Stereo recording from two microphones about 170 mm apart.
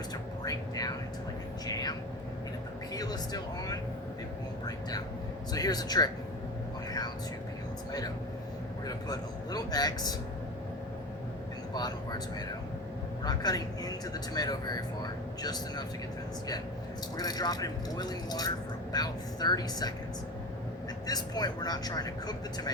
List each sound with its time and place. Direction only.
0.4 s a sound: 20° left (ahead or behind)
1.6 s vehicle: 20° left (ahead or behind)
2.9 s speech: 20° left (ahead or behind)
8.9 s speech: 20° left (ahead or behind)
11.7 s speech: 25° left (ahead or behind)
13.2 s speech: 20° left (ahead or behind)
17.2 s speech: 20° left (ahead or behind)
21.1 s speech: 25° left (ahead or behind)